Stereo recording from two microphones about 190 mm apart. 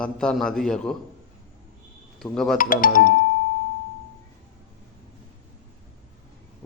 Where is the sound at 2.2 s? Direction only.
Centre (ahead or behind).